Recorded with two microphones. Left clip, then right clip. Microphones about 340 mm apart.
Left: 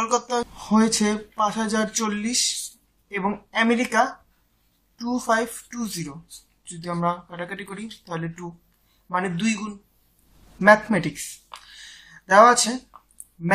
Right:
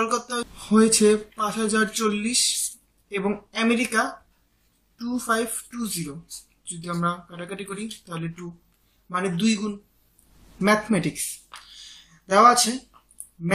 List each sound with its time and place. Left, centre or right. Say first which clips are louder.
0.0 s a woman's voice: left 2 dB; centre
9.1 s a woman's voice: even; centre
10.6 s a woman's voice: left 6 dB; centre
11.7 s a sound: left 2 dB; left